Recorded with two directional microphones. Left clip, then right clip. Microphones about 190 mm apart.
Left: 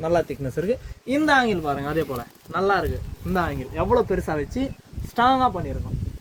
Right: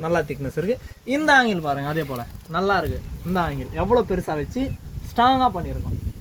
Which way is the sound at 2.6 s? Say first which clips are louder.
Even; 40° right (ahead or behind).